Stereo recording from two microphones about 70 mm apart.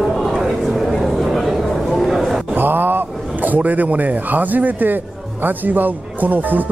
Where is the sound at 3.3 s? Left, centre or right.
Right.